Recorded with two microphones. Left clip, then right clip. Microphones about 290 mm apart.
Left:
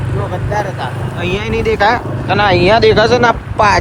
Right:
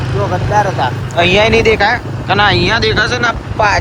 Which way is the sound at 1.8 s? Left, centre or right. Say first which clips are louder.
Left 1 dB; centre.